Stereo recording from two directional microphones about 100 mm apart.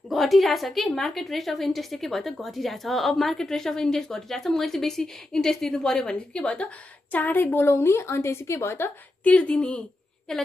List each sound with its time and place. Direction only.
0.1 s a woman's voice: centre (ahead or behind)